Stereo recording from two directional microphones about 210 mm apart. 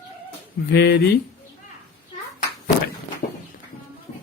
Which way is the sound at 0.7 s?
50° left (ahead or behind).